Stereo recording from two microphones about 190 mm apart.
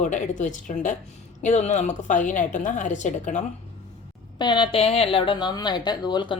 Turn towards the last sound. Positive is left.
turn(degrees=25)  # may be behind; listen again after turning